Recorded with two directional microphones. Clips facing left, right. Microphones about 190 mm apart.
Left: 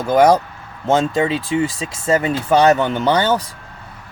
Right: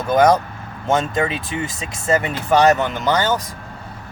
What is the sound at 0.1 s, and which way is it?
Speech, 30° left (ahead or behind).